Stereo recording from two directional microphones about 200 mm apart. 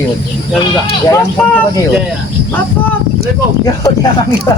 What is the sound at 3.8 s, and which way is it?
Speech, 20° left (ahead or behind).